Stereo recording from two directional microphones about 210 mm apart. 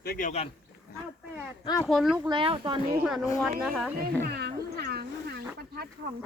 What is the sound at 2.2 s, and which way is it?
Speech, 25° right (ahead or behind).